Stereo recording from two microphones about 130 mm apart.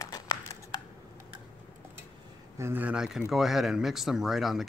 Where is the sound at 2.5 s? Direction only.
15° right (ahead or behind).